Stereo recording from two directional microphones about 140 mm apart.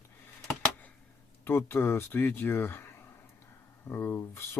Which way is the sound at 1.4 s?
15° left (ahead or behind).